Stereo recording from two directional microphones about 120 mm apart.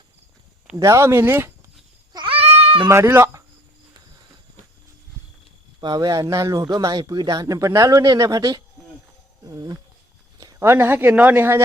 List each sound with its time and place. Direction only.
0.8 s speech: 25° right (ahead or behind)
2.1 s goat: 45° right (ahead or behind)
2.9 s speech: 20° right (ahead or behind)
5.8 s speech: 35° right (ahead or behind)